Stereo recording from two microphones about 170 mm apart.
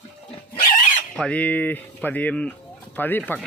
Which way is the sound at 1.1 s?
5° left (ahead or behind).